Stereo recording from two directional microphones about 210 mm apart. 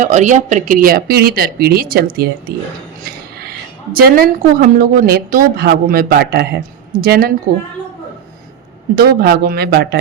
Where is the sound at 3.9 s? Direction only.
45° right (ahead or behind).